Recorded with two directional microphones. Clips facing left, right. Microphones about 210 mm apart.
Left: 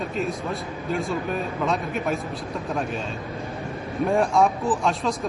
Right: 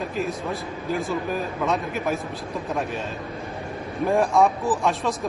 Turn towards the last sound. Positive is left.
turn(degrees=0)  # may be behind; listen again after turning